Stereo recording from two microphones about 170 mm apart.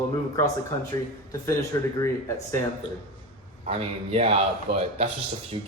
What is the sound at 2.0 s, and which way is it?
Speech, 15° left (ahead or behind).